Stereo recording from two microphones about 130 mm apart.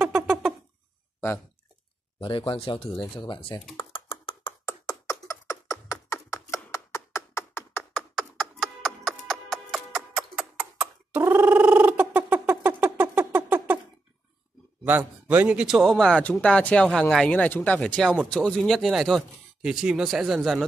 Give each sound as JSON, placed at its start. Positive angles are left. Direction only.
{"t": 0.0, "sound": "rodents", "side_deg": -5}
{"t": 2.1, "sound": "speech", "side_deg": 40}
{"t": 3.9, "sound": "a sound", "side_deg": 40}
{"t": 4.6, "sound": "beatboxing", "side_deg": 25}
{"t": 6.3, "sound": "a sound", "side_deg": 25}
{"t": 8.2, "sound": "music", "side_deg": 0}
{"t": 14.9, "sound": "a man's voice", "side_deg": -15}